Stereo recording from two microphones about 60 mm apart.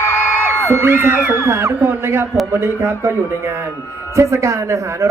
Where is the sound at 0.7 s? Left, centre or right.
Right.